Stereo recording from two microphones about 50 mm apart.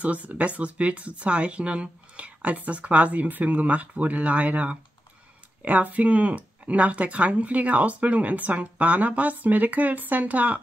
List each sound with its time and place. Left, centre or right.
0.0 s speech: right